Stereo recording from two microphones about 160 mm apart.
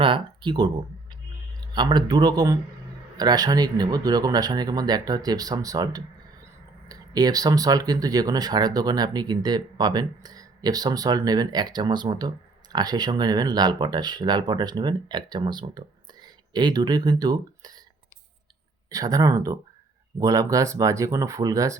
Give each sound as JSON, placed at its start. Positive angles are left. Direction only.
{"t": 0.0, "sound": "speech", "side_deg": -30}
{"t": 18.9, "sound": "speech", "side_deg": -20}